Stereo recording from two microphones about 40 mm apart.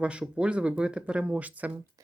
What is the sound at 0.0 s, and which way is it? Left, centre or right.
Speech, right.